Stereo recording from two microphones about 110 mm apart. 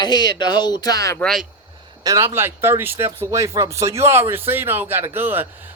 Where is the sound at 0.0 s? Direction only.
40° left (ahead or behind).